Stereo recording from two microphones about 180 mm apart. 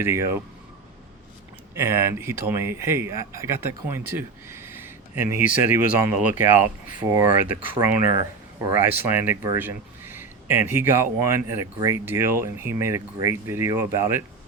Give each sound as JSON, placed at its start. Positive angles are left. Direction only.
{"t": 0.0, "sound": "speech", "side_deg": -15}
{"t": 1.7, "sound": "speech", "side_deg": -15}